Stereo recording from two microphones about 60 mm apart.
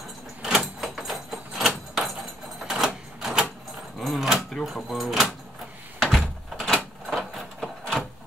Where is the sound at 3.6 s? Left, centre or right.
Centre.